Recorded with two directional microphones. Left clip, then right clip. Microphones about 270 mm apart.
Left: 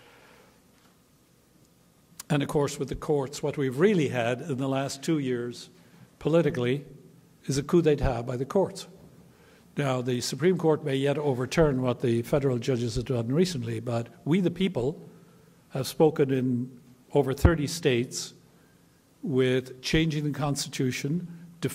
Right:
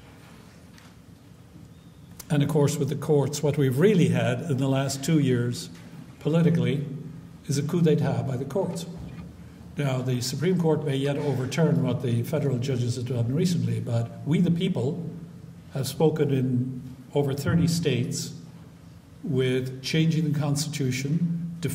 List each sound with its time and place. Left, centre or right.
2.1 s speech: left
6.2 s a man's voice: left
19.3 s a man's voice: left